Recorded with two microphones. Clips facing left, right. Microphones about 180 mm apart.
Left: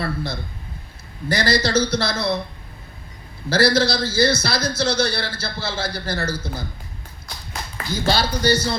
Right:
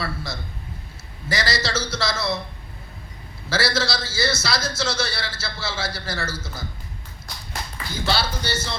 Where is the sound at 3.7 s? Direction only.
55° left (ahead or behind).